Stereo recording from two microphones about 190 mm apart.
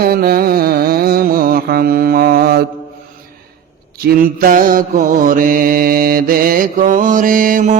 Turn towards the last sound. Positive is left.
turn(degrees=-45)  # may be behind; listen again after turning